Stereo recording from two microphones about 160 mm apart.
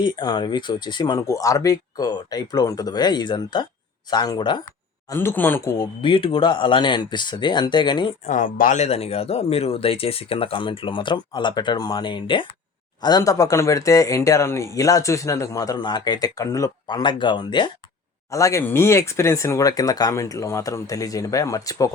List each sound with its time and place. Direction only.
0.0 s speech: 25° left (ahead or behind)
5.1 s speech: 15° left (ahead or behind)
8.3 s speech: 55° left (ahead or behind); by 21.8 s 20° left (ahead or behind)